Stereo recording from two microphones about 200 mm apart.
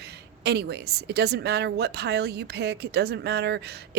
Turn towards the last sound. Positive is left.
turn(degrees=-55)  # may be behind; listen again after turning